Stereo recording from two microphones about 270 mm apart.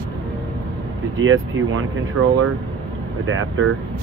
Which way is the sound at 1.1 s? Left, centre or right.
Right.